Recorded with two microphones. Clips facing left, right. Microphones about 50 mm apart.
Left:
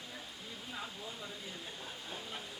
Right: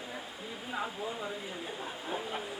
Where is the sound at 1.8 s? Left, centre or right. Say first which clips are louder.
Right 8 dB; right.